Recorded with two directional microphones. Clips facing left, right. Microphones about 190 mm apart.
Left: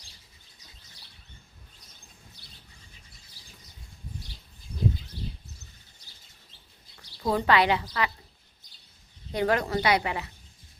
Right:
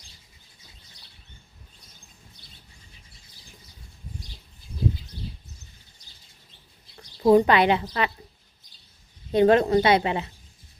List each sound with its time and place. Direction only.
7.2 s a woman's voice: 20° right (ahead or behind)
9.3 s a woman's voice: 25° right (ahead or behind)